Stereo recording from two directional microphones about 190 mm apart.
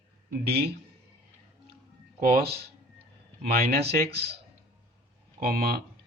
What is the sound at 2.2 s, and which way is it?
Speech, 55° right (ahead or behind).